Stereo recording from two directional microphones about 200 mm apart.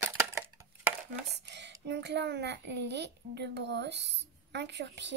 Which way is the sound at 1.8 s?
60° right (ahead or behind).